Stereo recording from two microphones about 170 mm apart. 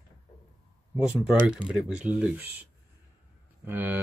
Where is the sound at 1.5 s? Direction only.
5° right (ahead or behind).